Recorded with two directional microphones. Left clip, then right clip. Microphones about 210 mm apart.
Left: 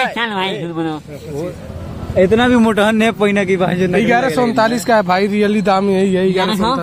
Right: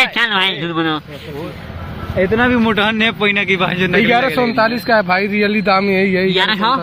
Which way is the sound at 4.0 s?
10° left (ahead or behind).